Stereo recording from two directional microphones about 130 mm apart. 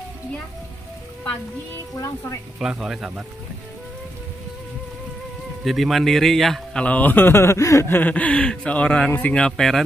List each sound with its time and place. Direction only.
2.0 s speech: 25° left (ahead or behind)
2.6 s speech: 5° right (ahead or behind)
5.6 s a man's voice: centre (ahead or behind)